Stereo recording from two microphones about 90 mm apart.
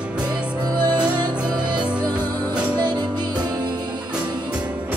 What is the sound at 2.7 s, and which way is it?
Music, 50° right (ahead or behind).